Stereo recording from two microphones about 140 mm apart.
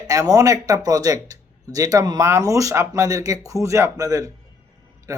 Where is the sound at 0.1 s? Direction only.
25° right (ahead or behind).